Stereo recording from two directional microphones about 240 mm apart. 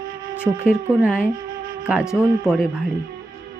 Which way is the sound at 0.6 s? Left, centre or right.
Centre.